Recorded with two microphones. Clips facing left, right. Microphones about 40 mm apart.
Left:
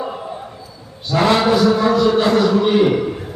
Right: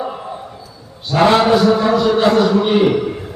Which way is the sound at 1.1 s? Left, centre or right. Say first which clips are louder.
Right 3 dB; right.